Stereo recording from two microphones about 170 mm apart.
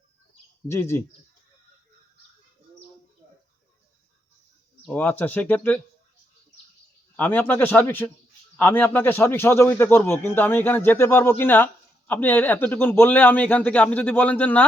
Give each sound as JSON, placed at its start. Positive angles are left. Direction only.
{"t": 0.7, "sound": "a man's voice", "side_deg": 15}
{"t": 4.9, "sound": "a man's voice", "side_deg": 10}
{"t": 7.2, "sound": "a man's voice", "side_deg": 10}